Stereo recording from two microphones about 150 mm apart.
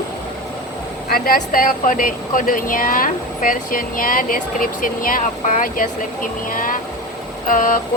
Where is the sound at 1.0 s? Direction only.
75° left (ahead or behind).